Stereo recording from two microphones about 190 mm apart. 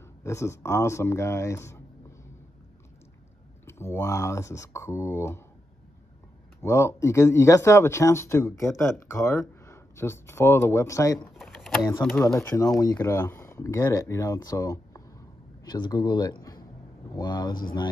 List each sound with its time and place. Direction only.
0.2 s speech: 15° left (ahead or behind)
3.6 s speech: 15° left (ahead or behind)
6.6 s speech: 15° left (ahead or behind)
11.3 s speech: centre (ahead or behind)
12.5 s speech: 20° left (ahead or behind)